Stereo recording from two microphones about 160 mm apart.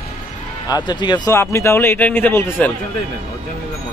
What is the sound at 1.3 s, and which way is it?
A man's voice, 15° left (ahead or behind).